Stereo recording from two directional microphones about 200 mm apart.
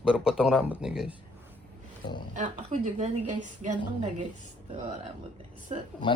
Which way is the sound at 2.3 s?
40° right (ahead or behind).